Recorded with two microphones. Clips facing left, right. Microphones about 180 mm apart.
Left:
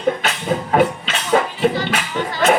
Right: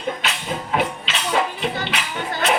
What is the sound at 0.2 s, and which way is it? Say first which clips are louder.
Music: left 6 dB; 45° left (ahead or behind).